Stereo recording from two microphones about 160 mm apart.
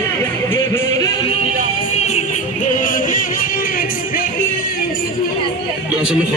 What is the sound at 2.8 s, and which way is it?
Music, 60° left (ahead or behind).